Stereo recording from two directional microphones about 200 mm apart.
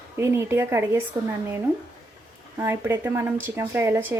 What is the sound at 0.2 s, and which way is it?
Speech, 15° right (ahead or behind).